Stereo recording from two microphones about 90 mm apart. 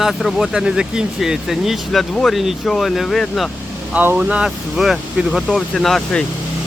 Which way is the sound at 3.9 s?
20° right (ahead or behind).